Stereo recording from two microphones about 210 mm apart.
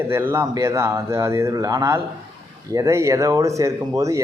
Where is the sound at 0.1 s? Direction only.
10° right (ahead or behind).